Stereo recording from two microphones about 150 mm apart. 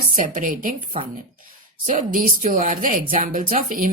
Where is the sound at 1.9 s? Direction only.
60° right (ahead or behind).